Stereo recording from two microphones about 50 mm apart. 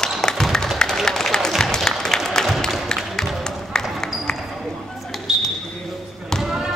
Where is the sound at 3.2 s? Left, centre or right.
Centre.